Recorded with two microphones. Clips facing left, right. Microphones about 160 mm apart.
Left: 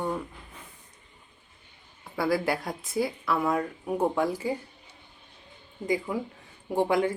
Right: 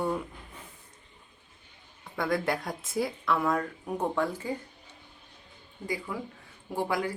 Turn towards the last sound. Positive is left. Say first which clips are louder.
# left 6 dB
turn(degrees=20)  # may be behind; listen again after turning